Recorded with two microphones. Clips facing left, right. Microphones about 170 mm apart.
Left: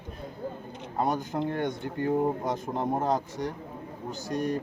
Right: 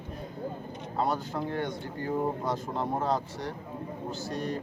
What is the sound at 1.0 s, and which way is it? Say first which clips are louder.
A man's voice: left 2 dB; 20° left (ahead or behind).